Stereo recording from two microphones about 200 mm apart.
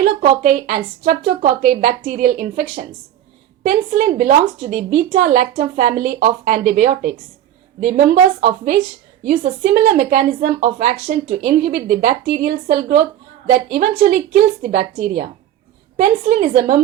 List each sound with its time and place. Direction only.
0.3 s a woman's voice: 40° right (ahead or behind)